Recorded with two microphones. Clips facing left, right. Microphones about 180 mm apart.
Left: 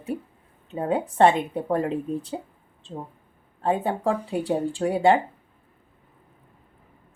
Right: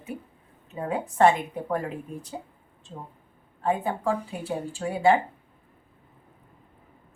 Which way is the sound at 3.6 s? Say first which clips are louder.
Left 2 dB; 35° left (ahead or behind).